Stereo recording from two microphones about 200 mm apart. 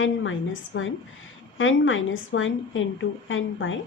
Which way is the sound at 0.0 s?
75° left (ahead or behind).